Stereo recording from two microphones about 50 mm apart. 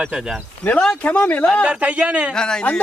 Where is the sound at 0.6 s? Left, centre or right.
Left.